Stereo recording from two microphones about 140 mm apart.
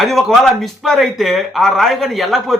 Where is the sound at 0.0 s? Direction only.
Centre (ahead or behind).